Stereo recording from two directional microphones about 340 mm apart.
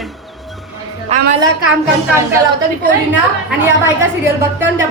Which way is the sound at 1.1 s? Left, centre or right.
Centre.